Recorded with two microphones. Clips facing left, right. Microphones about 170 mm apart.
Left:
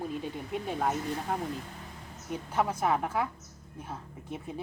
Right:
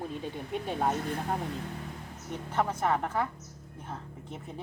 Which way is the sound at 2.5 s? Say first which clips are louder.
Even; 10° left (ahead or behind).